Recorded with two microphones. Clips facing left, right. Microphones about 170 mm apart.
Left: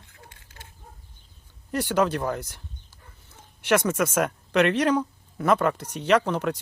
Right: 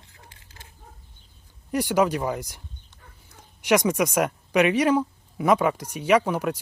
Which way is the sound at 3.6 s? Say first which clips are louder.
Right 2 dB; 10° right (ahead or behind).